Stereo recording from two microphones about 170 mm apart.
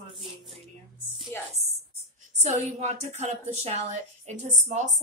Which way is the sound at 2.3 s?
40° right (ahead or behind).